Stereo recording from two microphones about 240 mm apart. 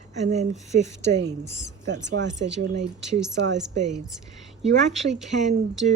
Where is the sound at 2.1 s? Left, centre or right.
Right.